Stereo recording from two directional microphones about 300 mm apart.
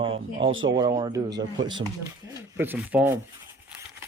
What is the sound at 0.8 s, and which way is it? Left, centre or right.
Speech, centre.